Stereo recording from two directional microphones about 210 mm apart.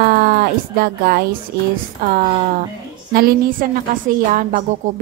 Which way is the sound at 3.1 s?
45° right (ahead or behind).